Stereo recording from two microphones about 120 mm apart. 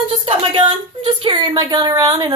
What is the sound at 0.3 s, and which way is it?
Female singing, 45° right (ahead or behind).